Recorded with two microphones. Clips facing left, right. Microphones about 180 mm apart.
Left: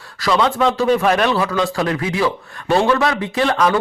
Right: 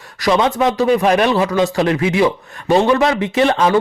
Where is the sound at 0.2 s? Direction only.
20° right (ahead or behind).